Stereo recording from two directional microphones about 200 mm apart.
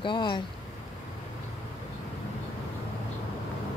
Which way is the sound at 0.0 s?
25° left (ahead or behind).